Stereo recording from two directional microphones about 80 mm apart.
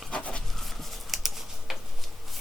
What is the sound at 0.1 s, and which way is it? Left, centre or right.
Pant, centre.